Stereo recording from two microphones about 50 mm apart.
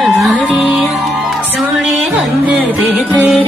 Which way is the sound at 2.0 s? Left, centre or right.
Right.